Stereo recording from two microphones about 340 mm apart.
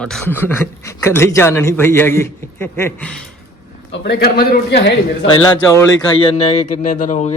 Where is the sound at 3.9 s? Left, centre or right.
Left.